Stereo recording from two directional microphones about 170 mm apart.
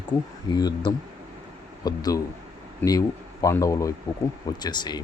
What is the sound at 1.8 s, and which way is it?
Speech, 20° left (ahead or behind).